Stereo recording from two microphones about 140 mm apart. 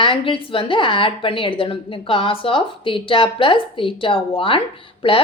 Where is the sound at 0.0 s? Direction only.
40° left (ahead or behind).